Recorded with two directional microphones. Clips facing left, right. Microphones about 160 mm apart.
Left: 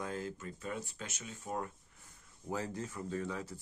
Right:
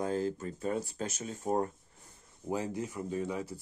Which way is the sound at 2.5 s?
15° right (ahead or behind).